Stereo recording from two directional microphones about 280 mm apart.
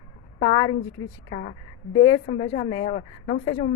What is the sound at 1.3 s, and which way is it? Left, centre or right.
Speech, left.